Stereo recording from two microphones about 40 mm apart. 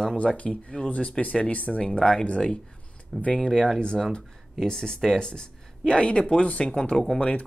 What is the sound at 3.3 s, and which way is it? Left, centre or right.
Speech, centre.